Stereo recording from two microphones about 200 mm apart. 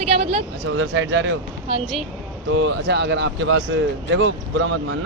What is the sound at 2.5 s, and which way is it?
Speech, 65° right (ahead or behind).